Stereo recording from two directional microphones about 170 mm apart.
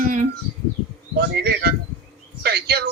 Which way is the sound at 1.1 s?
70° right (ahead or behind).